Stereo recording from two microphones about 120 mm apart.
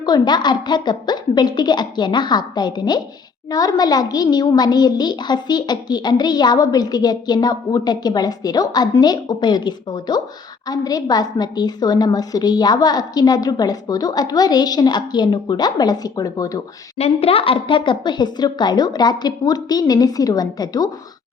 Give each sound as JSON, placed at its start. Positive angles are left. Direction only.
{"t": 0.0, "sound": "a woman's voice", "side_deg": 35}
{"t": 17.0, "sound": "a woman's voice", "side_deg": 55}